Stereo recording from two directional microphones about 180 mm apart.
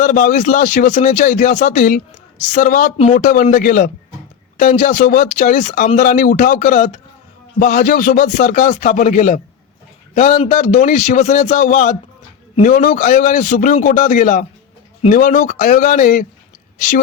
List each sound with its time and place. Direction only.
0.0 s a man's voice: 45° left (ahead or behind)